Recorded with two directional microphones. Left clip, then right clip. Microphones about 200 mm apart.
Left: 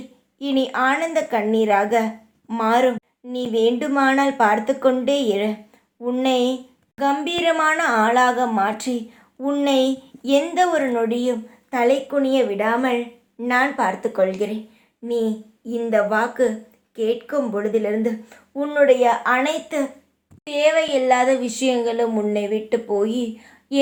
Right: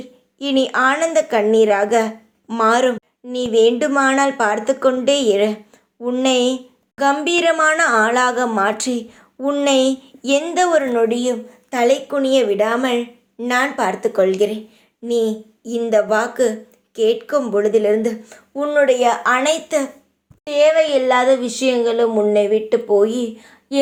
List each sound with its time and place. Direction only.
0.3 s speech: 35° right (ahead or behind)
20.4 s speech: 30° right (ahead or behind)